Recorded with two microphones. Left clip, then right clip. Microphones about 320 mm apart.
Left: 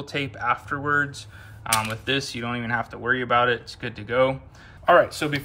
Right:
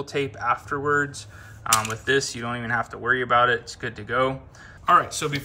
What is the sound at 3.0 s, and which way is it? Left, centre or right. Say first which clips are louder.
Speech: right 1 dB; left.